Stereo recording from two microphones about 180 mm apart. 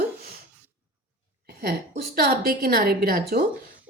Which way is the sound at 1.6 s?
55° right (ahead or behind).